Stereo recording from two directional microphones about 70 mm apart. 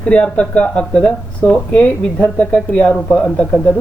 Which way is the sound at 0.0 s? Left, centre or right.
Centre.